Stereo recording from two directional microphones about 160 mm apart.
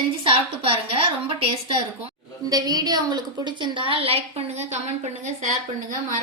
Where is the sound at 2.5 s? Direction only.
25° right (ahead or behind); by 5.5 s 45° right (ahead or behind).